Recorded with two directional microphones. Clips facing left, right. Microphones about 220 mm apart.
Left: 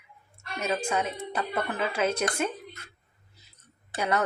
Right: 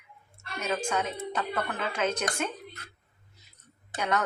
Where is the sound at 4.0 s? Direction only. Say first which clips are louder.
Left 2 dB; 10° left (ahead or behind).